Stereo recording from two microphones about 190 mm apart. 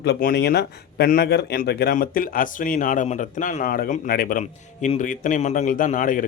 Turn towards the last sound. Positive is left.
turn(degrees=45)  # may be behind; listen again after turning